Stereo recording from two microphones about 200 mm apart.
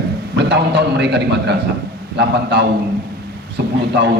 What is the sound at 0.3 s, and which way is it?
A man's voice, 60° right (ahead or behind).